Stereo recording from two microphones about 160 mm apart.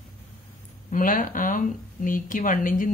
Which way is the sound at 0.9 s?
60° left (ahead or behind).